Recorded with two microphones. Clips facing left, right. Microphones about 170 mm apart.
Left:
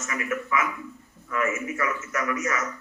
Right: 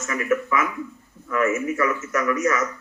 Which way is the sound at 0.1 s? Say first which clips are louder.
Right 6 dB; 40° right (ahead or behind).